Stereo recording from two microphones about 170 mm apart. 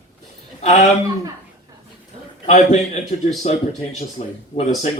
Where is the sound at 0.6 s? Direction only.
40° left (ahead or behind).